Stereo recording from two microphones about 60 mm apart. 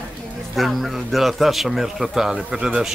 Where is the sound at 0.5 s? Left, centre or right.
Centre.